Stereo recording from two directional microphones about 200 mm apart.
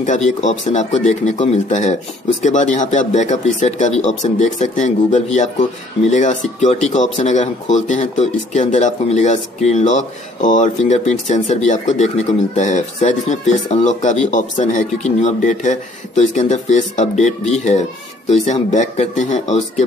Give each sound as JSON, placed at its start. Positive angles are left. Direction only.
{"t": 0.0, "sound": "speech", "side_deg": 40}